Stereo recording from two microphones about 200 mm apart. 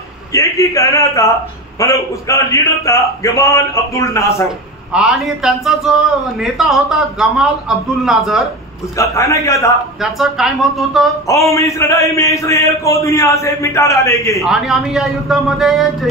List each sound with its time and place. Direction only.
0.3 s a man's voice: 15° left (ahead or behind)
4.9 s a man's voice: centre (ahead or behind)
8.9 s a man's voice: 15° left (ahead or behind)
10.1 s a man's voice: centre (ahead or behind)
11.2 s a man's voice: 15° left (ahead or behind)
14.4 s a man's voice: centre (ahead or behind)